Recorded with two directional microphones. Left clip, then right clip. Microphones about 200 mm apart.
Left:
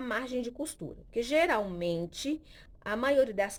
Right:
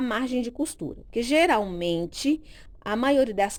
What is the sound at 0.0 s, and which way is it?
A woman's voice, 40° right (ahead or behind).